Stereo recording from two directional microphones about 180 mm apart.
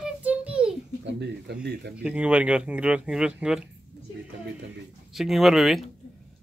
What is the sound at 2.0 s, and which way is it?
Speech, 5° right (ahead or behind).